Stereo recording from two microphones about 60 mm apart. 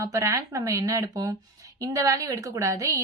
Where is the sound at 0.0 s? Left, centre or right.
Right.